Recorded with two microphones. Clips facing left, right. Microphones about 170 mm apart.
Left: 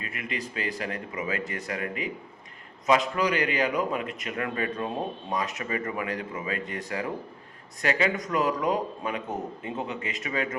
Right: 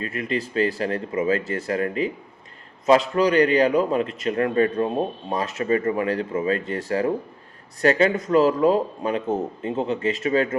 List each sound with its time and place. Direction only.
0.1 s a man's voice: 35° right (ahead or behind)